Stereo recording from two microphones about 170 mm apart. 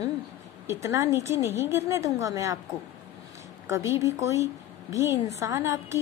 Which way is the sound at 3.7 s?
15° right (ahead or behind).